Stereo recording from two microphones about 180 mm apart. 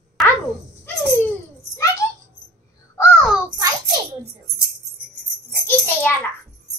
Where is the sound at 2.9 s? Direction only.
10° left (ahead or behind).